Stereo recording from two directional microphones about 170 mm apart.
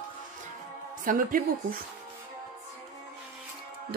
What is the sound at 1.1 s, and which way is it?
Speech, 55° right (ahead or behind).